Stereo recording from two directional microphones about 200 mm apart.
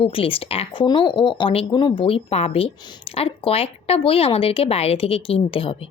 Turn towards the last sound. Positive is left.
turn(degrees=25)  # may be behind; listen again after turning